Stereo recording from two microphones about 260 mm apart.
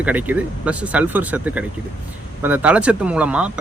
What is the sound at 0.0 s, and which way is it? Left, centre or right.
Speech, centre.